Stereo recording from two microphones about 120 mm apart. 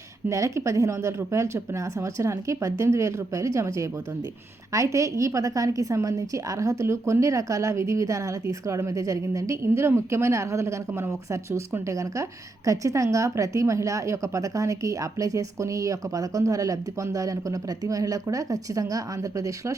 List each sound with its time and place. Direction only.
0.3 s a woman's voice: 25° right (ahead or behind)